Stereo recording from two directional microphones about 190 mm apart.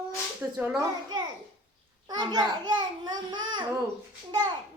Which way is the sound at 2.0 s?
20° right (ahead or behind).